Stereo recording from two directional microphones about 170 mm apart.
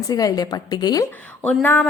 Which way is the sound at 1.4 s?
10° left (ahead or behind).